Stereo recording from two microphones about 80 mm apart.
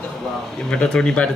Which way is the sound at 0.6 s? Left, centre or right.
Centre.